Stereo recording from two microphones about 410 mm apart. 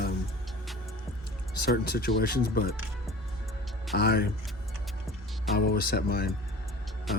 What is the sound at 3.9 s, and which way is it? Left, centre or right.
Speech, left.